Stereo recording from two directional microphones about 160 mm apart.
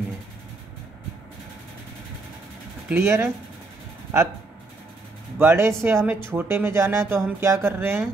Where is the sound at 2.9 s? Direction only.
15° right (ahead or behind).